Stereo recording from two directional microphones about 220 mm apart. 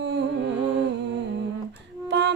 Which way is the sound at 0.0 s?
50° right (ahead or behind).